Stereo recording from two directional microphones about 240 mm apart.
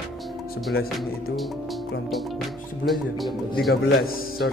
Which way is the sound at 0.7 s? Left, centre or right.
Left.